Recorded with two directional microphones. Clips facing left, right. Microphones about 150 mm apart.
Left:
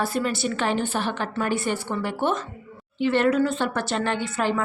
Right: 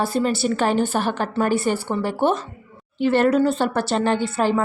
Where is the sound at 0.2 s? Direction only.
35° right (ahead or behind).